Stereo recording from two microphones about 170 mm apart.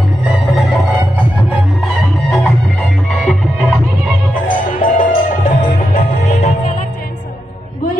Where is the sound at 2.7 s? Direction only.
Centre (ahead or behind).